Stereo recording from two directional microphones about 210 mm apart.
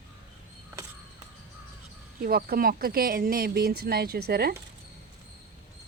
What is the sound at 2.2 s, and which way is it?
Speech, 45° right (ahead or behind).